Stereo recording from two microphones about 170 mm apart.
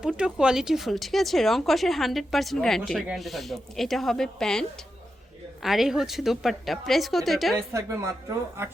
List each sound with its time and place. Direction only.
0.0 s speech: 5° right (ahead or behind)
5.6 s speech: centre (ahead or behind)
7.7 s a woman's voice: 15° right (ahead or behind)